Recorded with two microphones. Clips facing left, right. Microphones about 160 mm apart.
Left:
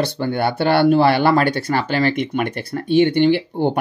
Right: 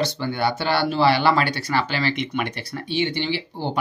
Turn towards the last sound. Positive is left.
turn(degrees=55)  # may be behind; listen again after turning